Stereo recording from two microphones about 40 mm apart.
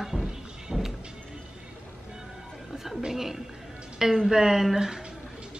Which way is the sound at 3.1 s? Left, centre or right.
Centre.